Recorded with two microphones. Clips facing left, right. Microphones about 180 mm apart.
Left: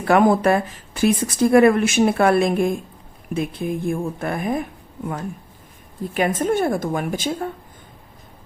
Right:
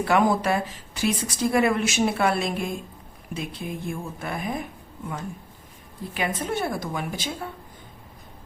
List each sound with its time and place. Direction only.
0.0 s speech: 50° left (ahead or behind)
6.1 s speech: 45° left (ahead or behind)